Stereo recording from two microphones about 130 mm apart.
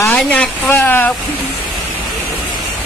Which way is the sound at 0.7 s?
15° left (ahead or behind).